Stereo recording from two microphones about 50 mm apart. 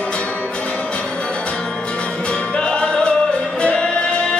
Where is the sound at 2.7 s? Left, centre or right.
Centre.